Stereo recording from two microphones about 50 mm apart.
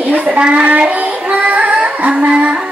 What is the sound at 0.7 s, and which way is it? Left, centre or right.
Music, right.